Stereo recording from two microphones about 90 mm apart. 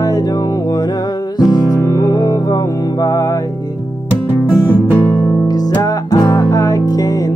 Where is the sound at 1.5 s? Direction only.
45° left (ahead or behind).